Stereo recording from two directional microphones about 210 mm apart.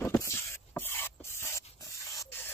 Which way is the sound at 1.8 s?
15° left (ahead or behind).